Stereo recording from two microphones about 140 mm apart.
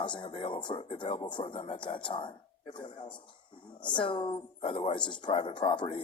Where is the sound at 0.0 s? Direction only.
35° left (ahead or behind).